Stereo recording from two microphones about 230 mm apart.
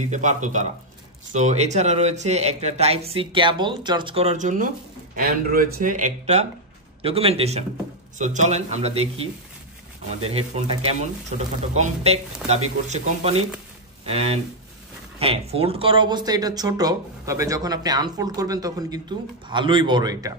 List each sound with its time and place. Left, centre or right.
0.1 s speech: right; by 20.3 s centre